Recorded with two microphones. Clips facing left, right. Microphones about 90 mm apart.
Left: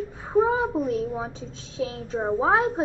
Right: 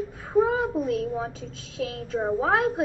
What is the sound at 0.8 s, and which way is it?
A woman's voice, 20° left (ahead or behind).